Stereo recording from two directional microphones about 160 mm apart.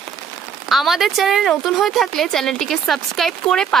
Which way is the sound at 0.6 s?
Centre (ahead or behind).